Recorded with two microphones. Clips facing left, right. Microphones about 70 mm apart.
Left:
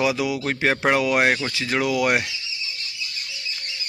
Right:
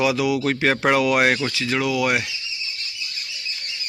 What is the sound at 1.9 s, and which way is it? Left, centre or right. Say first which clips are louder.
Speech: left 1 dB; left.